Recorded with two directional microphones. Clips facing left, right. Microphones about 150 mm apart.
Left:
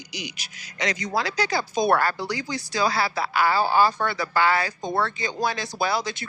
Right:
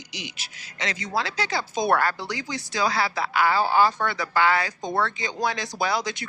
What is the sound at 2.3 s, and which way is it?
Speech, 20° right (ahead or behind).